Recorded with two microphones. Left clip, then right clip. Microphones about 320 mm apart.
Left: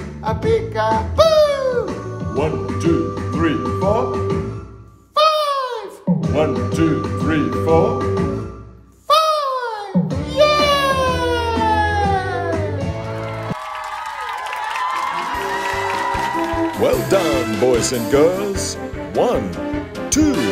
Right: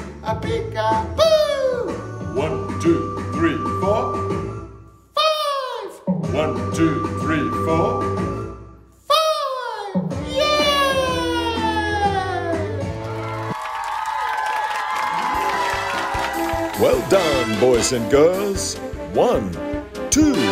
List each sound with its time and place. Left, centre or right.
0.3 s music: centre
2.3 s speech: centre
5.1 s music: centre
6.3 s speech: centre
9.0 s a sound: centre
10.3 s music: centre
14.1 s music: centre